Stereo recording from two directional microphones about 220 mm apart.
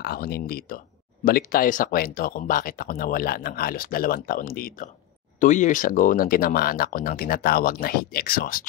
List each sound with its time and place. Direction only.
0.0 s speech: 45° left (ahead or behind)